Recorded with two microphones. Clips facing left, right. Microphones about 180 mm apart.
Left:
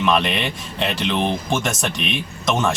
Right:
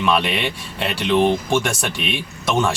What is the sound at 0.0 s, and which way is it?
Speech, 5° right (ahead or behind).